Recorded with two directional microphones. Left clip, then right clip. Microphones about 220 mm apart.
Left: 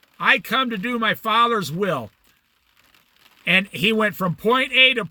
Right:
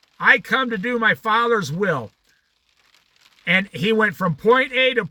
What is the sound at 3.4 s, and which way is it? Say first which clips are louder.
A man's voice: left 1 dB; 10° left (ahead or behind).